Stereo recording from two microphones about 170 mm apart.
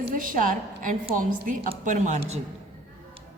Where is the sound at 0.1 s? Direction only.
50° right (ahead or behind).